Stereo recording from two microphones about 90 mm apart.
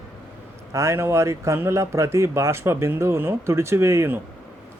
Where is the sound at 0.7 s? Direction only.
30° right (ahead or behind).